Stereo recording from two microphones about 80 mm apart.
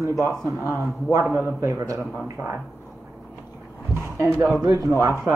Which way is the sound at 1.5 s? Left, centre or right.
Right.